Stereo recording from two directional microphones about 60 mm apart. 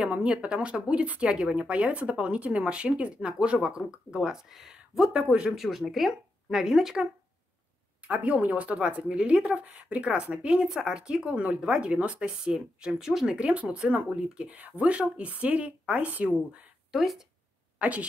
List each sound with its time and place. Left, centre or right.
0.0 s speech: centre
5.6 s speech: centre
8.1 s speech: right; by 13.4 s centre
13.4 s speech: centre
14.5 s speech: right
16.9 s speech: centre
17.7 s a woman's voice: right